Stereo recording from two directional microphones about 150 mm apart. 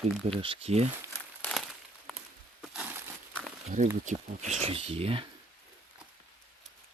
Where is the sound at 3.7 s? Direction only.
55° right (ahead or behind).